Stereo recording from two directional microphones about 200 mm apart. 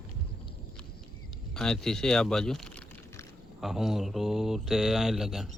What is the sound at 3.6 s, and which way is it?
Speech, centre (ahead or behind).